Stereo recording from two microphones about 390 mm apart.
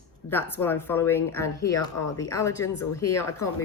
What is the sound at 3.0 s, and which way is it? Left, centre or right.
Speech, left.